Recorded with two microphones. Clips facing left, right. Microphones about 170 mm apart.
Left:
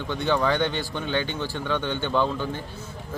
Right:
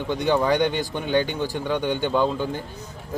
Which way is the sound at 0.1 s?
15° right (ahead or behind).